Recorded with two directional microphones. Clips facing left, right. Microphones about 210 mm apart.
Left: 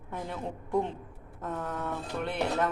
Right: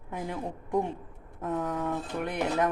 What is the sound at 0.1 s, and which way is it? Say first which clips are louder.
A woman's voice: right 2 dB; 10° right (ahead or behind).